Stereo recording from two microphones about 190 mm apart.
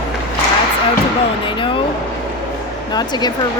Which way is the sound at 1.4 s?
25° left (ahead or behind).